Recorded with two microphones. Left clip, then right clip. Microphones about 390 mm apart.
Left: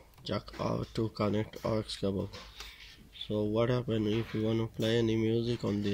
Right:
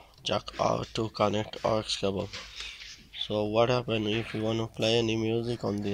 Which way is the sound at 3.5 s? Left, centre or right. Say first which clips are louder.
Right 7 dB; centre.